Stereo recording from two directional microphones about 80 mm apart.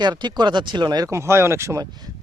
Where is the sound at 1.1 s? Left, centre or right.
Right.